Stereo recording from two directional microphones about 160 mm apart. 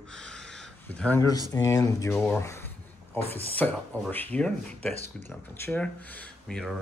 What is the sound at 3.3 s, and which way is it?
Speech, 10° left (ahead or behind).